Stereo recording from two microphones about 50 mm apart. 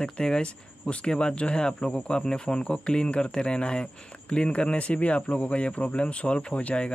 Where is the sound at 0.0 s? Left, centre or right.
Centre.